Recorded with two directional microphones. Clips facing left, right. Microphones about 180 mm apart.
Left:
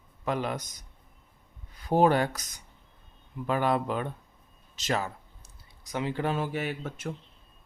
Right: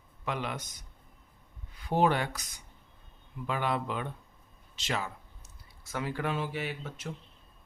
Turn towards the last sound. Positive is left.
turn(degrees=50)  # may be behind; listen again after turning